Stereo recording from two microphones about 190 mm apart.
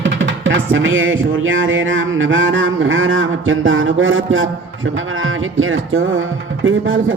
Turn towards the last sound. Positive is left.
turn(degrees=-90)